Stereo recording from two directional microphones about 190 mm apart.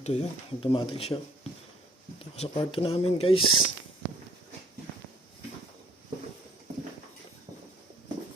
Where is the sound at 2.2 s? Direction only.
30° left (ahead or behind).